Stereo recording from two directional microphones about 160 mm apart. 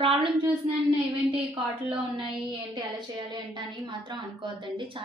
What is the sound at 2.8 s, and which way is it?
A woman's voice, 30° right (ahead or behind).